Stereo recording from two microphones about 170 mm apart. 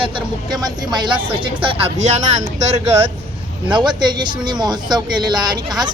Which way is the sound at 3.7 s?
25° right (ahead or behind).